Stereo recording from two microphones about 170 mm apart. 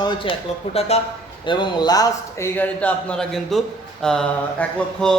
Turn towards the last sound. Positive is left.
turn(degrees=5)  # may be behind; listen again after turning